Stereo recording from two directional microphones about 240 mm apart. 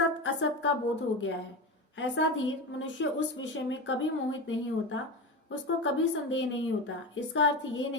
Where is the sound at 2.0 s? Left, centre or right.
Left.